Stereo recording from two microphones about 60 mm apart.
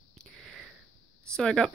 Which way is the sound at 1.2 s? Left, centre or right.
Centre.